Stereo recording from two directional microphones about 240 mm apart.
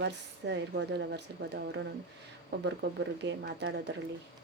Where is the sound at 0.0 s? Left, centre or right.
Right.